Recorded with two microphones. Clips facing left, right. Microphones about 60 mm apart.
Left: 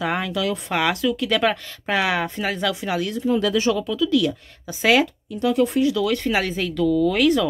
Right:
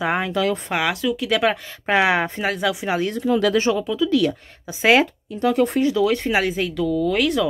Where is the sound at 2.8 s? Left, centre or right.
Right.